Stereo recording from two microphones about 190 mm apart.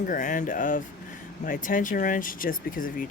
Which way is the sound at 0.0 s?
45° left (ahead or behind).